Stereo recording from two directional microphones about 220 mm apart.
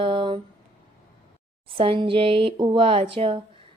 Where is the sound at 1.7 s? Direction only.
25° right (ahead or behind).